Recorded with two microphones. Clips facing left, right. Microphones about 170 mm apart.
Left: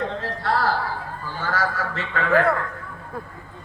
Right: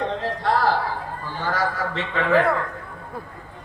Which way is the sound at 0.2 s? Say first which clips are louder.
Right 2 dB; 15° right (ahead or behind).